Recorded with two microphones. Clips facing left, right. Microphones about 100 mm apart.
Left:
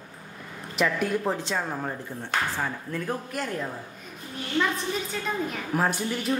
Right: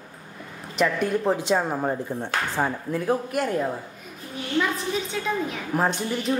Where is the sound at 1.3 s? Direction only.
15° right (ahead or behind).